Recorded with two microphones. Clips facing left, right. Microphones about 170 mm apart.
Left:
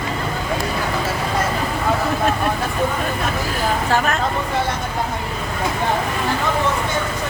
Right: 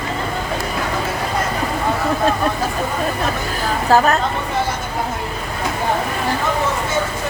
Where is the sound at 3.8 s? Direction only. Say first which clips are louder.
Right 9 dB; 40° right (ahead or behind).